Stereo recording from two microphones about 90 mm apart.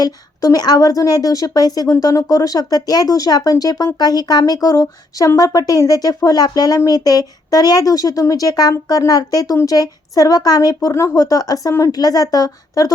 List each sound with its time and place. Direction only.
0.0 s a woman's voice: 45° left (ahead or behind)